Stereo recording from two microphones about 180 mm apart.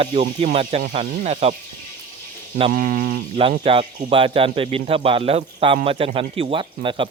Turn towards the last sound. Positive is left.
turn(degrees=-30)  # may be behind; listen again after turning